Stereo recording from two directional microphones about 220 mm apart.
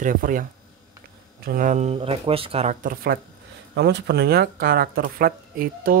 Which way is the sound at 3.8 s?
50° right (ahead or behind).